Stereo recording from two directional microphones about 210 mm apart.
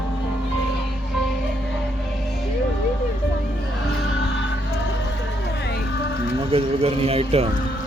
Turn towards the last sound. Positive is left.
turn(degrees=-30)  # may be behind; listen again after turning